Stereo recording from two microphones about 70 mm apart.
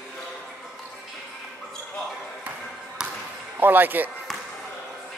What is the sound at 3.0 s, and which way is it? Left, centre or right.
Basketball bounce, centre.